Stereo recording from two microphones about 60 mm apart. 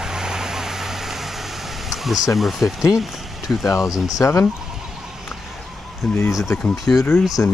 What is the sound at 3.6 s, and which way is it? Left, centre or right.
Speech, left.